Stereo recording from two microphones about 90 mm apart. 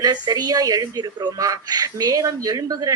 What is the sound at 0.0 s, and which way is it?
A woman's voice, 50° right (ahead or behind).